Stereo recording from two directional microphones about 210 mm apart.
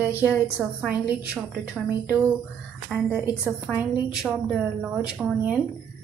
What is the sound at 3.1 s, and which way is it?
A woman's voice, 10° right (ahead or behind).